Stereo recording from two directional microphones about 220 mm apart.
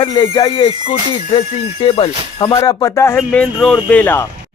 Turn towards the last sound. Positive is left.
turn(degrees=10)  # may be behind; listen again after turning